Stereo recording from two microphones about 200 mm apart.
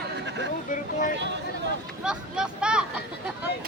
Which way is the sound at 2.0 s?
5° right (ahead or behind).